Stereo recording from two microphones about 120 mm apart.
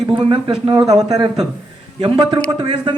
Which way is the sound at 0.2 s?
45° right (ahead or behind).